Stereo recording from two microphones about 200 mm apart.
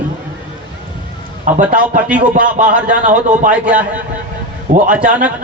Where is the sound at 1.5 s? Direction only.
40° right (ahead or behind).